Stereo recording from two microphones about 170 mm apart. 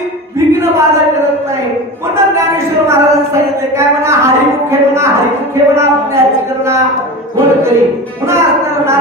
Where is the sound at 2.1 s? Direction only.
15° right (ahead or behind).